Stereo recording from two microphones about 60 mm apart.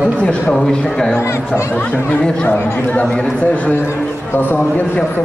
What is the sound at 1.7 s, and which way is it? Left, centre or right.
Speech, left.